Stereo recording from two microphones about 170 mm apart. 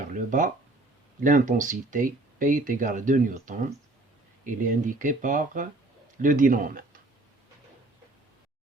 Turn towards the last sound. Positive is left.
turn(degrees=-55)  # may be behind; listen again after turning